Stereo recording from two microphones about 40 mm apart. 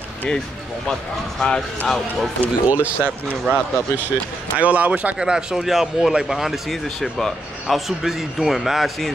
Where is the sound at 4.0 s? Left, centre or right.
Right.